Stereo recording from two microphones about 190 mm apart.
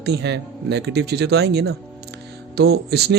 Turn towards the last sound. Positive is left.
turn(degrees=-60)  # may be behind; listen again after turning